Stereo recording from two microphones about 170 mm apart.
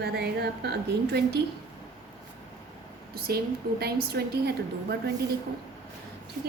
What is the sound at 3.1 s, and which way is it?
A woman's voice, 65° right (ahead or behind).